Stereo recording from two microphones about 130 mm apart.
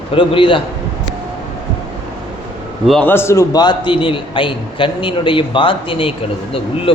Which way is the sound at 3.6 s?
35° left (ahead or behind).